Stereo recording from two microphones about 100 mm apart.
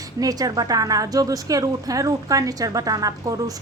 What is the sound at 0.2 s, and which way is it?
Speech, 40° right (ahead or behind).